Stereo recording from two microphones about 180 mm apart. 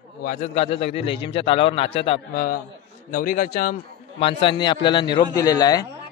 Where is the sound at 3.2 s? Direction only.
50° left (ahead or behind).